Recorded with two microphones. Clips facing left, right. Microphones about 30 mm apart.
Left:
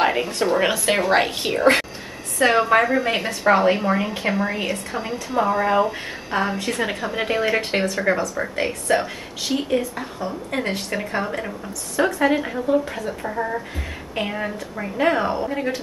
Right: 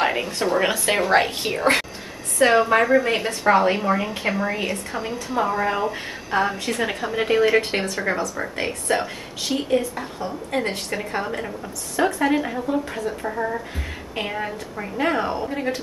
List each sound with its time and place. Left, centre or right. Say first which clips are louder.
0.0 s a woman's voice: left 2 dB; centre